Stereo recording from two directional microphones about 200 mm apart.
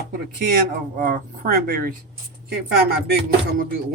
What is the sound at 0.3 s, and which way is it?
Speech, 45° right (ahead or behind).